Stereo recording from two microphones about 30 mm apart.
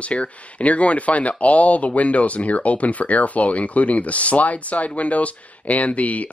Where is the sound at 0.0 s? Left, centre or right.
Left.